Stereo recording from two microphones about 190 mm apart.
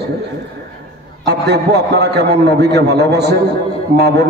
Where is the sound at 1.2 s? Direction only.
60° right (ahead or behind).